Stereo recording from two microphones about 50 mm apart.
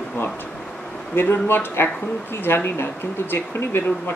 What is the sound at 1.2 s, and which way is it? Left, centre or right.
Speech, left.